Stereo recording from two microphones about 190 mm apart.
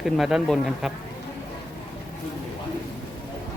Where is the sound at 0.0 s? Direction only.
Centre (ahead or behind).